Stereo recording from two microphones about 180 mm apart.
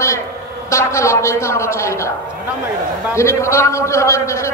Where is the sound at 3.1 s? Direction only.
15° left (ahead or behind).